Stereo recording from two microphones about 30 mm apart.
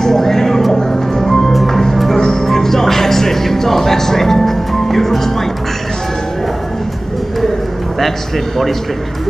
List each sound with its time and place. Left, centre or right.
0.0 s a sound: centre
0.7 s music: left
1.5 s music: centre
2.4 s music: centre